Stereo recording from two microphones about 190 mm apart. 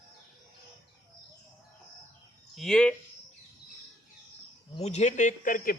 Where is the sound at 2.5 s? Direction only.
5° left (ahead or behind).